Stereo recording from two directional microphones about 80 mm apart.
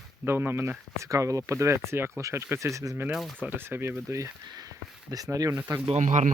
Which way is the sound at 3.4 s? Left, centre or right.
Right.